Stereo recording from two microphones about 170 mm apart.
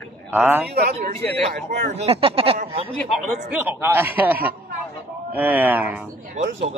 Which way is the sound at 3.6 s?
10° right (ahead or behind).